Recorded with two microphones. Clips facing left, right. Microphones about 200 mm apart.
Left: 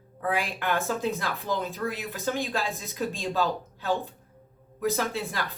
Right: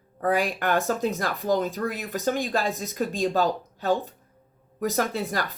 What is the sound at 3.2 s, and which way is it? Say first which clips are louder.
Speech: right 5 dB; 40° right (ahead or behind).